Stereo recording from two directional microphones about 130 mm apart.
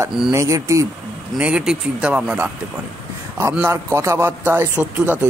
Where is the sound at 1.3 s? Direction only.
10° right (ahead or behind).